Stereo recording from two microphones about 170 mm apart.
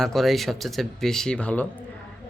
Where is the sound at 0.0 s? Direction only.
Centre (ahead or behind).